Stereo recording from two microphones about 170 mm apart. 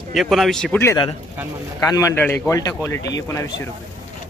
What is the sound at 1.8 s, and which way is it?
A man's voice, 20° left (ahead or behind).